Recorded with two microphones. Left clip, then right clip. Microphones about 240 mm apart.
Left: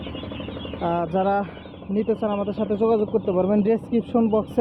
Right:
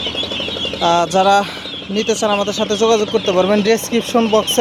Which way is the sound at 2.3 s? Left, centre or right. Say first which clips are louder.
Right 8 dB; right.